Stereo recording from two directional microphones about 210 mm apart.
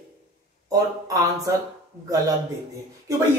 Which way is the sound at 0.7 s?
15° right (ahead or behind).